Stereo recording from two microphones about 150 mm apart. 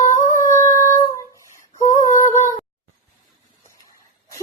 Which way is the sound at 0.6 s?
20° left (ahead or behind).